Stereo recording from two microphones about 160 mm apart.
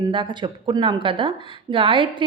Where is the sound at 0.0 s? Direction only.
30° right (ahead or behind).